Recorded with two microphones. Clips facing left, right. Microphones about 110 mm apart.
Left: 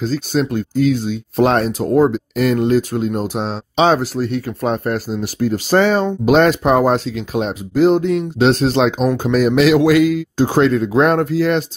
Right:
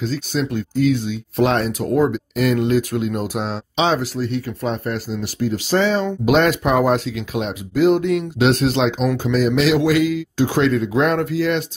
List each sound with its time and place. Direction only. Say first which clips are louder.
0.0 s speech: left 4 dB; 40° left (ahead or behind); by 3.5 s 25° left (ahead or behind)
3.7 s speech: left 5 dB; 45° left (ahead or behind)
6.0 s speech: left 3 dB; 35° left (ahead or behind)
8.8 s speech: left 3 dB; 50° left (ahead or behind)
10.3 s speech: left 2 dB; 35° left (ahead or behind)